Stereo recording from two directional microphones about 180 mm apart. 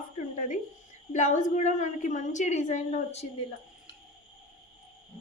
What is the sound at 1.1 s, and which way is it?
A woman's voice, 40° left (ahead or behind).